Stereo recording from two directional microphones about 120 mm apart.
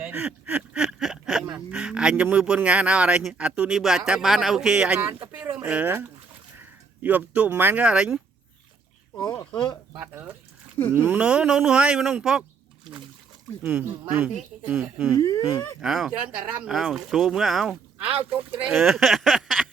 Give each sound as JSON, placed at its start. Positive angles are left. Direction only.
{"t": 0.0, "sound": "speech", "side_deg": -15}
{"t": 10.0, "sound": "speech", "side_deg": -15}
{"t": 13.6, "sound": "speech", "side_deg": -15}
{"t": 15.2, "sound": "speech", "side_deg": 30}
{"t": 15.8, "sound": "speech", "side_deg": -5}